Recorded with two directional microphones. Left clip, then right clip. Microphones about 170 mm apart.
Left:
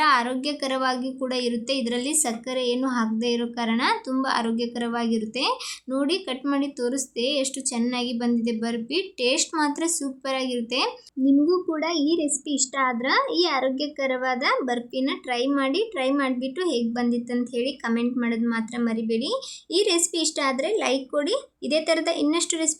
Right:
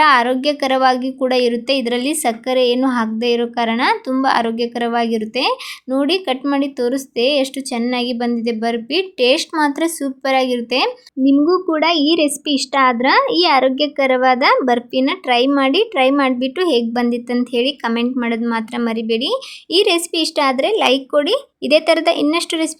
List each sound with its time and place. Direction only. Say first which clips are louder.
0.0 s speech: right 9 dB; 30° right (ahead or behind)